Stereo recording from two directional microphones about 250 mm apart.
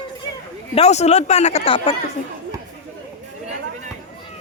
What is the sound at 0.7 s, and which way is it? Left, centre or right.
Speech, left.